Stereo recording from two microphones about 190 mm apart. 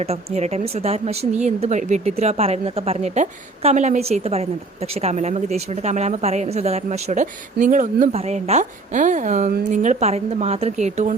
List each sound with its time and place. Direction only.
0.0 s a woman's voice: 35° right (ahead or behind)